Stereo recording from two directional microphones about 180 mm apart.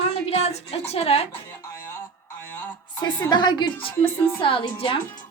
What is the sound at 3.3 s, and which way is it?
A woman's voice, 25° left (ahead or behind).